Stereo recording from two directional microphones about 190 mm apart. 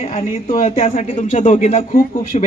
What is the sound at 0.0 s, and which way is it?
A man's voice, 35° left (ahead or behind).